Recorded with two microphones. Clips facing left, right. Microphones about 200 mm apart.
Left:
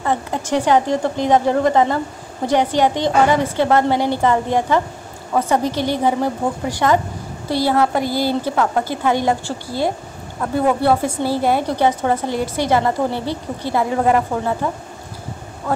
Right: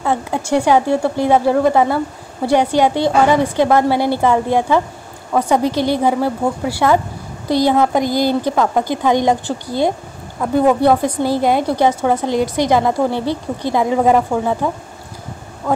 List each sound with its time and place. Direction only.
0.0 s a woman's voice: 10° right (ahead or behind)